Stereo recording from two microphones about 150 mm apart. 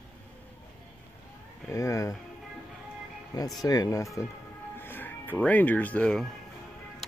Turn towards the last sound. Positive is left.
turn(degrees=5)  # may be behind; listen again after turning